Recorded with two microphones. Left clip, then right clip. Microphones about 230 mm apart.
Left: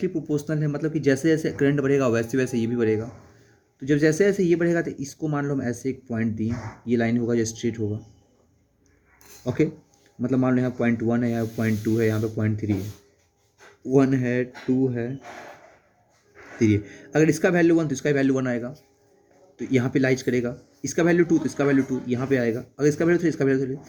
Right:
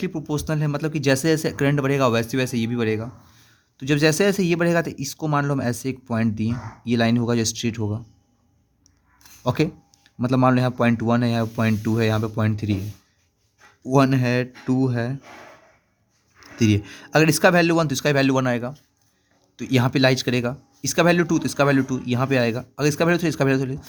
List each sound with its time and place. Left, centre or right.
0.0 s speech: right
9.4 s speech: right
13.9 s speech: right
16.6 s speech: right